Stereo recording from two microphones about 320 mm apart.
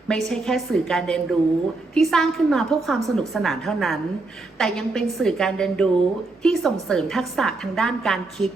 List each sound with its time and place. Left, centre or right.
0.1 s a woman's voice: centre